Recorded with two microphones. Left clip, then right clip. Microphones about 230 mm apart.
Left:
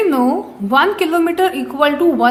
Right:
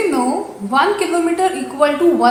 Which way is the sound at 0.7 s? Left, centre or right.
Left.